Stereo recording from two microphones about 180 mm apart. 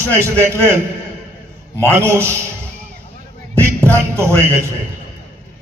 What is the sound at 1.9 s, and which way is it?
Speech, 15° right (ahead or behind).